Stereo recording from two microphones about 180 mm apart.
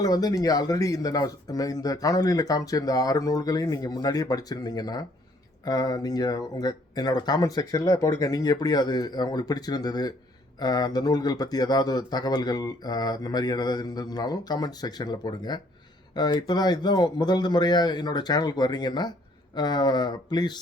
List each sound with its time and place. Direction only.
0.0 s speech: 20° left (ahead or behind)